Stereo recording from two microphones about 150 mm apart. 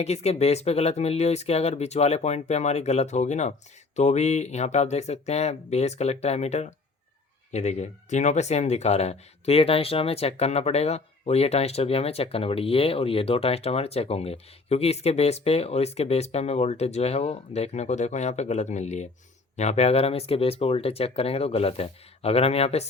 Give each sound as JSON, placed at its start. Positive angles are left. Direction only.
{"t": 0.0, "sound": "speech", "side_deg": 45}